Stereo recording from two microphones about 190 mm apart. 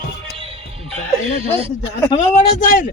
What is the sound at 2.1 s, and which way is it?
Speech, 35° left (ahead or behind).